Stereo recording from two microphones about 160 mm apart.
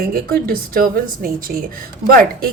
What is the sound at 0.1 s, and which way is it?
A woman's voice, 65° right (ahead or behind).